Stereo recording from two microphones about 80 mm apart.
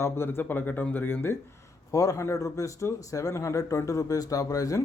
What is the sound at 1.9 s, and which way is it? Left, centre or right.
A man's voice, left.